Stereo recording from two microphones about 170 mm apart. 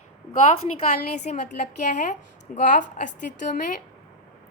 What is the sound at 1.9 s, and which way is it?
A woman's voice, 45° left (ahead or behind).